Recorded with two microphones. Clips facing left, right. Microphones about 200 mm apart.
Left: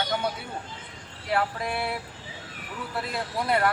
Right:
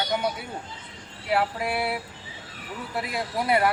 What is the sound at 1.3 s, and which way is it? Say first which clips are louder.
Speech: right 2 dB; 10° right (ahead or behind).